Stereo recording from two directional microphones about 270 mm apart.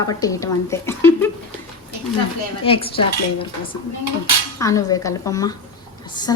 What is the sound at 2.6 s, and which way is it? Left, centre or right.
Dishes, left.